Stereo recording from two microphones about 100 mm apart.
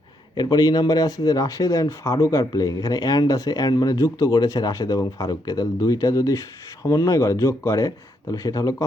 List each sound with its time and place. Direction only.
0.3 s speech: 40° left (ahead or behind)